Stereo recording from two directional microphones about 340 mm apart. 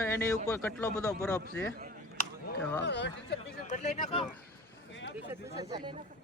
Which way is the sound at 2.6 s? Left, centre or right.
Centre.